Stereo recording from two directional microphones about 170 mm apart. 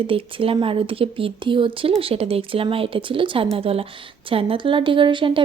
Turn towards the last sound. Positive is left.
turn(degrees=-30)  # may be behind; listen again after turning